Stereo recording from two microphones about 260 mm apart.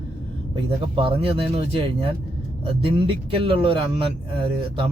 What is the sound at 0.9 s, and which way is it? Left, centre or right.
Speech, centre.